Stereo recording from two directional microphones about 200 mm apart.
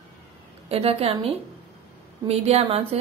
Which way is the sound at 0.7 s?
30° right (ahead or behind).